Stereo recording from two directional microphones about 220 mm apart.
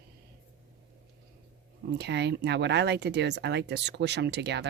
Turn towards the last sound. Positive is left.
turn(degrees=-50)  # may be behind; listen again after turning